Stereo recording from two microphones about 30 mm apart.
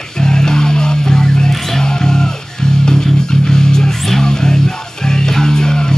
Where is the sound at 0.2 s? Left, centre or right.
Left.